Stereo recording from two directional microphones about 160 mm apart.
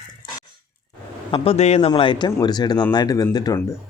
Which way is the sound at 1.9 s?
30° left (ahead or behind).